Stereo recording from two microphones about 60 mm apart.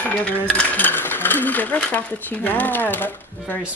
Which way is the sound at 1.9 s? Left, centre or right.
Left.